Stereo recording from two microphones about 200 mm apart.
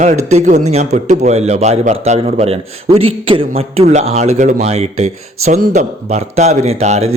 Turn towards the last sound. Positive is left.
turn(degrees=-35)  # may be behind; listen again after turning